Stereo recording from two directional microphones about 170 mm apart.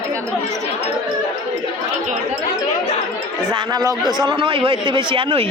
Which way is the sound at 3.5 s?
25° right (ahead or behind).